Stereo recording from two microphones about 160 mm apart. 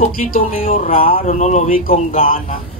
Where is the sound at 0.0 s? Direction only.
60° left (ahead or behind).